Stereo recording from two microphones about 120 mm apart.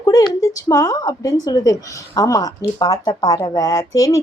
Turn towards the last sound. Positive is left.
turn(degrees=30)  # may be behind; listen again after turning